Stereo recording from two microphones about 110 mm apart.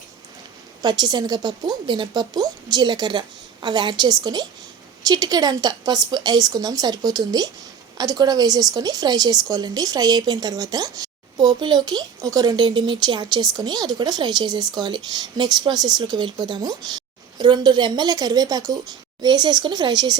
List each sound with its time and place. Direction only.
0.8 s a woman's voice: 40° right (ahead or behind)